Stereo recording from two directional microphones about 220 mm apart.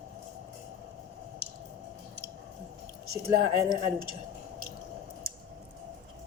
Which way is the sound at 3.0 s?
45° right (ahead or behind).